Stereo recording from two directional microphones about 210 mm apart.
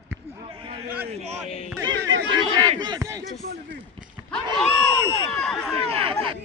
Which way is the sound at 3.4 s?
45° right (ahead or behind).